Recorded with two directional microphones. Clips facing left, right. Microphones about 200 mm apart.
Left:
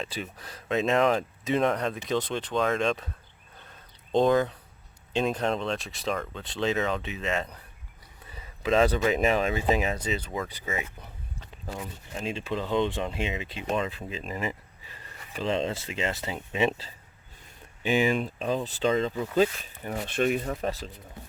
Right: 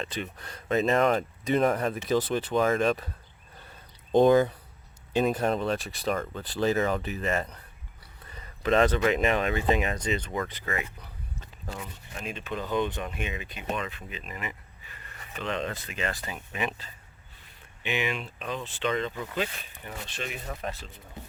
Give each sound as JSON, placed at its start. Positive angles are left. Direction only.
{"t": 0.0, "sound": "speech", "side_deg": 5}
{"t": 4.3, "sound": "speech", "side_deg": -5}
{"t": 8.3, "sound": "a sound", "side_deg": 5}
{"t": 9.2, "sound": "speech", "side_deg": 5}
{"t": 12.2, "sound": "speech", "side_deg": 30}
{"t": 17.8, "sound": "speech", "side_deg": 40}
{"t": 20.1, "sound": "speech", "side_deg": 50}